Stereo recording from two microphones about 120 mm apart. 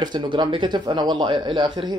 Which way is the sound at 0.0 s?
40° right (ahead or behind).